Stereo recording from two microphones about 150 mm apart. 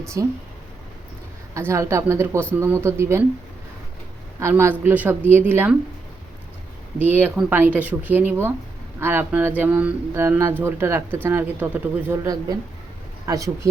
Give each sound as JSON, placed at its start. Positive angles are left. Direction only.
{"t": 0.1, "sound": "speech", "side_deg": -20}
{"t": 1.5, "sound": "speech", "side_deg": -20}
{"t": 4.4, "sound": "speech", "side_deg": -20}
{"t": 7.0, "sound": "speech", "side_deg": -10}